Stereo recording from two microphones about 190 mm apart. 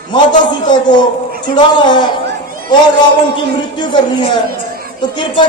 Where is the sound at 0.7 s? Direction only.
20° left (ahead or behind).